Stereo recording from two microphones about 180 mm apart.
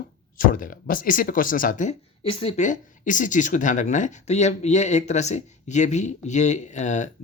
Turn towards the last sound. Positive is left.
turn(degrees=40)  # may be behind; listen again after turning